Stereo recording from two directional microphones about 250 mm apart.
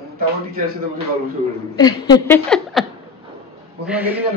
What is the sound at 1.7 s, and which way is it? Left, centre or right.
Speech, centre.